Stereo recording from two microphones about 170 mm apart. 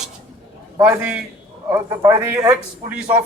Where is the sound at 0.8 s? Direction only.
10° right (ahead or behind).